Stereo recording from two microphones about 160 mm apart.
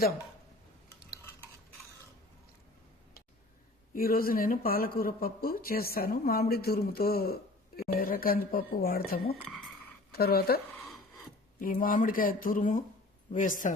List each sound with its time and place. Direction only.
3.9 s speech: 65° left (ahead or behind)
9.4 s a sound: 10° left (ahead or behind)
10.1 s speech: 75° left (ahead or behind)
11.6 s speech: 65° left (ahead or behind)